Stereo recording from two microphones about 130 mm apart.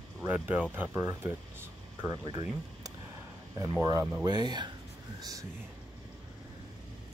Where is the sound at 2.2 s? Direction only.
35° right (ahead or behind).